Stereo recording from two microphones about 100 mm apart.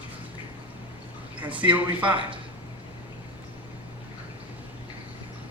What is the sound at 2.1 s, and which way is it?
Speech, 60° right (ahead or behind).